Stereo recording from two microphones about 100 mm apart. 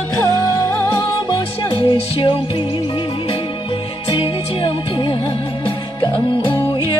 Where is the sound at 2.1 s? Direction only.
65° left (ahead or behind).